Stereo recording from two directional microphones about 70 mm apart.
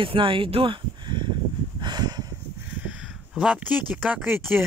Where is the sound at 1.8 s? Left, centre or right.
Right.